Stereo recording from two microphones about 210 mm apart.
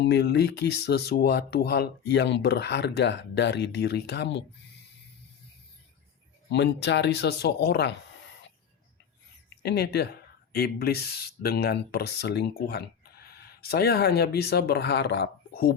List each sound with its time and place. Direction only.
0.0 s speech: 50° left (ahead or behind)
6.5 s speech: 55° left (ahead or behind)
9.6 s speech: 50° left (ahead or behind)